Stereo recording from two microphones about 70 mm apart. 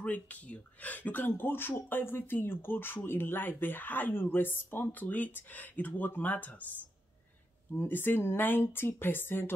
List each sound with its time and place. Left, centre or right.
0.0 s speech: left
7.7 s speech: left